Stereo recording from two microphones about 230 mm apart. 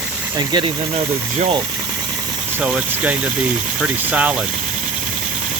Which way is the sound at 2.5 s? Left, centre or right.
Centre.